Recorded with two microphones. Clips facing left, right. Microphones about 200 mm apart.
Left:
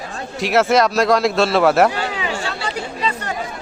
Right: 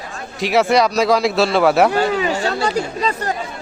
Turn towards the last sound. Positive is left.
turn(degrees=-40)  # may be behind; listen again after turning